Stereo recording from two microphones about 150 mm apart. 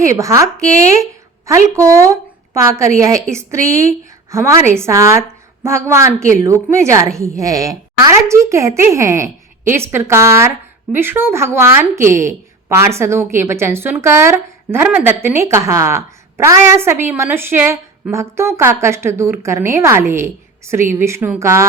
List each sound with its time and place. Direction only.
0.0 s a woman's voice: 20° right (ahead or behind)
1.7 s a woman's voice: 20° right (ahead or behind)